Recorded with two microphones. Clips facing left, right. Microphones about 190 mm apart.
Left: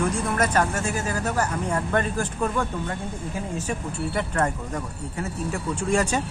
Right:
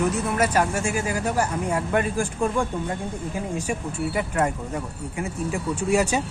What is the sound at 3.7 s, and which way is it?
Speech, 10° right (ahead or behind).